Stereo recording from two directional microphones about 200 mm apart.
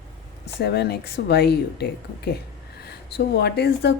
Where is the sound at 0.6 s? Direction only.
55° left (ahead or behind).